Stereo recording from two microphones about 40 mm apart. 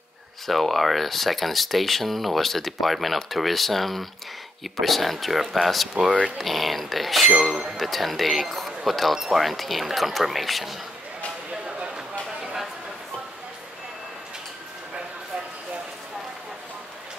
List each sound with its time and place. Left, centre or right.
0.5 s speech: centre
7.4 s speech: centre
7.7 s speech: centre
11.5 s a sound: right